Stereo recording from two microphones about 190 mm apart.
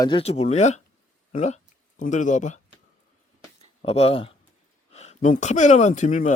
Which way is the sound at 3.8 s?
30° left (ahead or behind).